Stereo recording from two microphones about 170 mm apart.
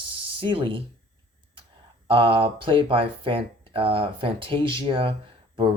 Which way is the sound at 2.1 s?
30° right (ahead or behind).